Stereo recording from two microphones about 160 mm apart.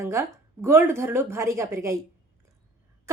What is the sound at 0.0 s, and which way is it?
Speech, 15° right (ahead or behind).